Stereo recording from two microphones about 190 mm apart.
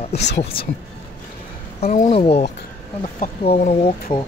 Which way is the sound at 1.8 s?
35° left (ahead or behind).